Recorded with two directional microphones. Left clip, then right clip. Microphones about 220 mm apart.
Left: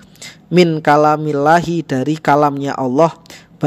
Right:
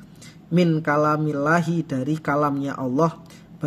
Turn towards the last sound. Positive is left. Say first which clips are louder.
# left 9 dB
turn(degrees=40)  # may be behind; listen again after turning